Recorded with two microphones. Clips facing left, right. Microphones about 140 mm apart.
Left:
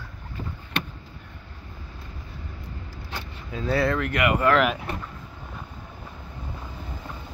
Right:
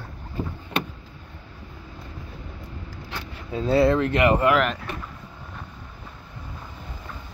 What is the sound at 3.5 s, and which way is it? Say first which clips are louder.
Speech: right 5 dB; 25° right (ahead or behind).